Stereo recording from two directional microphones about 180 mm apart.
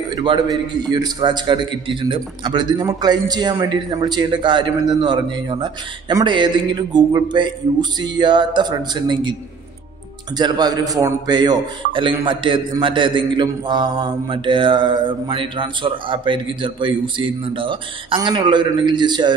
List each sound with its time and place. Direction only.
0.1 s a man's voice: 25° right (ahead or behind)